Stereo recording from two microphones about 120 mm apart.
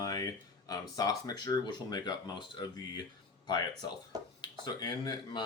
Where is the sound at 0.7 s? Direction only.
30° left (ahead or behind).